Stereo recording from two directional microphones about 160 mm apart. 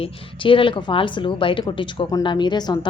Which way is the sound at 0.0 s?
35° left (ahead or behind).